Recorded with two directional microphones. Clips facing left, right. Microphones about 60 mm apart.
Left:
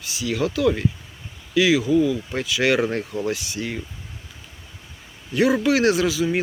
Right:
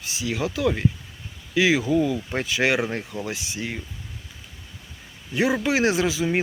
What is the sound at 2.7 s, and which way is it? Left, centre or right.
Speech, centre.